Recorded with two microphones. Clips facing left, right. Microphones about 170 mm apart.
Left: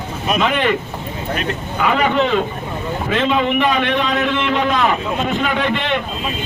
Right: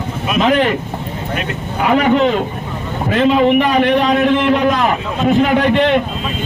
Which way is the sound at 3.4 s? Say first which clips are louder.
Right 5 dB; 40° right (ahead or behind).